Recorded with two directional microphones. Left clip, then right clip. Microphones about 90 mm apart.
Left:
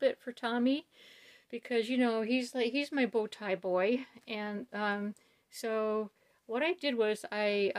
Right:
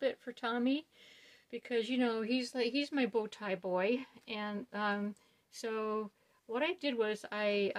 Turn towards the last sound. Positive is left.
turn(degrees=45)  # may be behind; listen again after turning